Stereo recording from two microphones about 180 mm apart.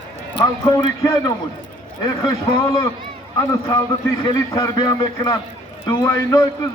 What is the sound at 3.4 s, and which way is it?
A man's voice, 15° left (ahead or behind).